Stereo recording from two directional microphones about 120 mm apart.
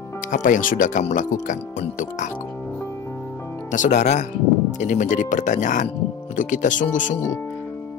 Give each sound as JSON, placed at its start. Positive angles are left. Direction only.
{"t": 0.3, "sound": "speech", "side_deg": 90}
{"t": 3.7, "sound": "speech", "side_deg": 80}
{"t": 4.7, "sound": "speech", "side_deg": 90}